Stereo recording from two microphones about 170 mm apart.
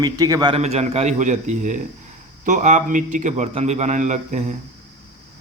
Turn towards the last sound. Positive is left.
turn(degrees=-45)  # may be behind; listen again after turning